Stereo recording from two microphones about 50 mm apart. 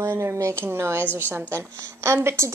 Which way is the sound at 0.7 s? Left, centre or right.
Right.